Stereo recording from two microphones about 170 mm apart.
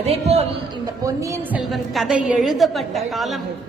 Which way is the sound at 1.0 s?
20° right (ahead or behind).